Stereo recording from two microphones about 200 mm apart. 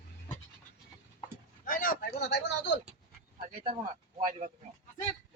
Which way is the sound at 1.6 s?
45° left (ahead or behind).